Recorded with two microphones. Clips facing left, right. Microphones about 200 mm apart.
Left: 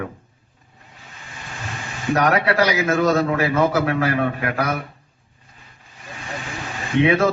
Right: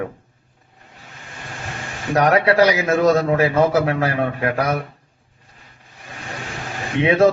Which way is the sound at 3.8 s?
30° right (ahead or behind).